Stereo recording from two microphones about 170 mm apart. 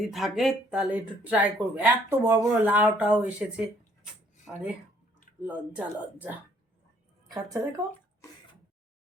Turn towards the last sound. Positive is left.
turn(degrees=-20)  # may be behind; listen again after turning